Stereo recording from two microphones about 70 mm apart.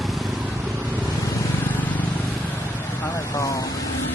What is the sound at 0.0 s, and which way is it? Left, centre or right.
Vehicle, centre.